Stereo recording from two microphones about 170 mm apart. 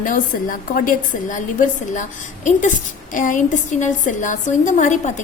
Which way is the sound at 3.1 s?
50° left (ahead or behind).